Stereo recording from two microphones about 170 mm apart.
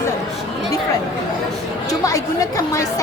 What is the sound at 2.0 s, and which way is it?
Speech, 20° left (ahead or behind).